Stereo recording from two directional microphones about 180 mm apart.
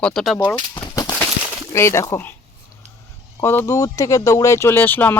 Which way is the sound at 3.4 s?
15° left (ahead or behind).